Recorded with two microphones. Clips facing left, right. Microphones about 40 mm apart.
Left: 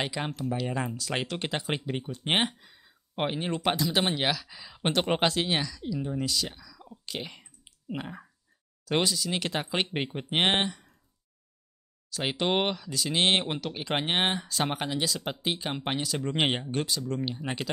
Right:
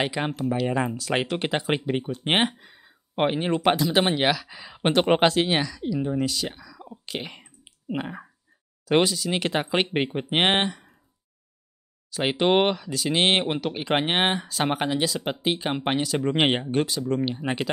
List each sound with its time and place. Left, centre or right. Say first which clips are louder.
0.0 s speech: right 6 dB; centre
12.1 s speech: right 6 dB; centre